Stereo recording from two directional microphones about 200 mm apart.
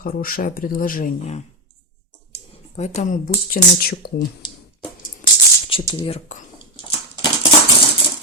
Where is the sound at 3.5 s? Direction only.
50° left (ahead or behind).